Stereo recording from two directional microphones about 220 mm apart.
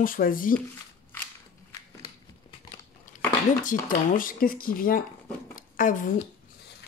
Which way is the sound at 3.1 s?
35° left (ahead or behind).